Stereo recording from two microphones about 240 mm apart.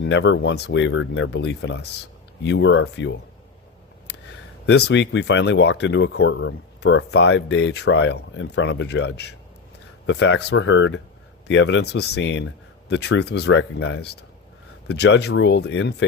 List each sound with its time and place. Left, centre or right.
0.0 s speech: left
4.6 s speech: left